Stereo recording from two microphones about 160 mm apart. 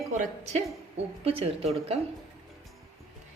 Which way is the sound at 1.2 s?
40° right (ahead or behind).